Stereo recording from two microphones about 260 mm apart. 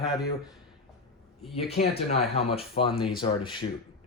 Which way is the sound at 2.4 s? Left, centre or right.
Left.